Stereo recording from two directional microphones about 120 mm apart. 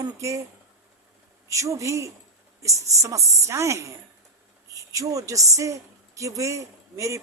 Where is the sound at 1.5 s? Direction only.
25° right (ahead or behind).